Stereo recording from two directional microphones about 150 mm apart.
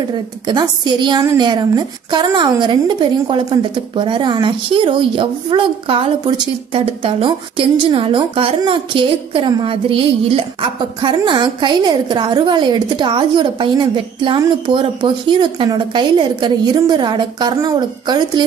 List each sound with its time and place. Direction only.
0.5 s a woman's voice: 30° right (ahead or behind)